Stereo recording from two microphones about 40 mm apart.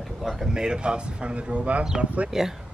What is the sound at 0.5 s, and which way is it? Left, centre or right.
Speech, centre.